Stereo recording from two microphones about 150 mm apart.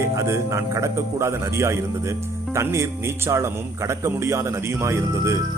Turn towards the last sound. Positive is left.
turn(degrees=-20)  # may be behind; listen again after turning